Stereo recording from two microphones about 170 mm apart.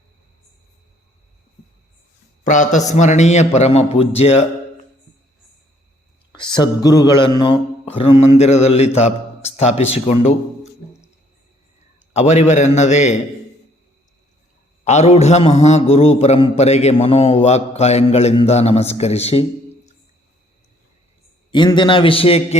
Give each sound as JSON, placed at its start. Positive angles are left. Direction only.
{"t": 2.4, "sound": "a man's voice", "side_deg": 45}
{"t": 6.3, "sound": "a man's voice", "side_deg": 25}
{"t": 12.1, "sound": "a man's voice", "side_deg": 40}
{"t": 14.8, "sound": "a man's voice", "side_deg": 40}
{"t": 21.5, "sound": "a man's voice", "side_deg": 30}